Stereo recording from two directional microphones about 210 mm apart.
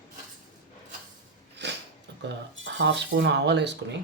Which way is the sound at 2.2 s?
55° right (ahead or behind).